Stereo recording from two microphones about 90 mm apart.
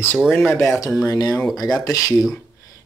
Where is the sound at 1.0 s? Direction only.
45° left (ahead or behind).